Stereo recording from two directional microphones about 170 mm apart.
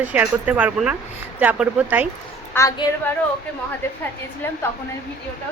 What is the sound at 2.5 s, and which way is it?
Speech, 20° left (ahead or behind).